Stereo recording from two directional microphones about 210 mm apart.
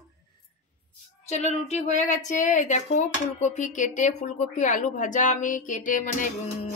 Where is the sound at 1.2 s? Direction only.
30° left (ahead or behind).